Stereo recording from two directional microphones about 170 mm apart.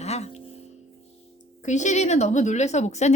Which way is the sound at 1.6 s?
45° left (ahead or behind).